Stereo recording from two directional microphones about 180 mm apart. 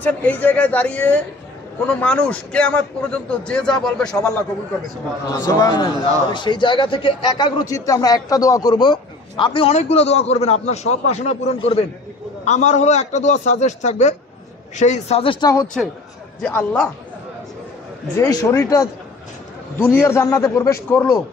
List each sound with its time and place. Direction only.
0.0 s a man's voice: 10° left (ahead or behind)
5.3 s a man's voice: 20° left (ahead or behind); by 15.3 s 35° left (ahead or behind)
15.8 s a man's voice: centre (ahead or behind)
18.1 s speech: 15° left (ahead or behind)